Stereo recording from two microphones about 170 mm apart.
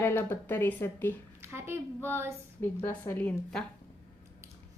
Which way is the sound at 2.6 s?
15° left (ahead or behind).